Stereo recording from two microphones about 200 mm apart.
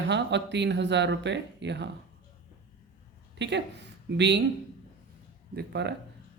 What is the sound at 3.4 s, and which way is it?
Speech, 60° right (ahead or behind).